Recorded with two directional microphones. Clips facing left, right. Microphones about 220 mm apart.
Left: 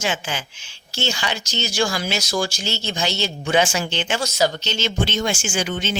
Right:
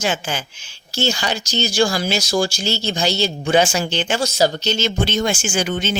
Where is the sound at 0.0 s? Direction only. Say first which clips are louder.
Right 3 dB; 40° right (ahead or behind).